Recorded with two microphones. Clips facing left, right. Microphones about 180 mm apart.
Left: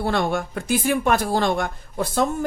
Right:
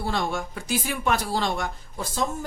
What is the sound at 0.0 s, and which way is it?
Speech, 60° left (ahead or behind).